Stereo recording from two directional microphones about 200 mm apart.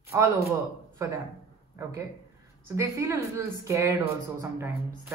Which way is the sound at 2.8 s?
15° right (ahead or behind).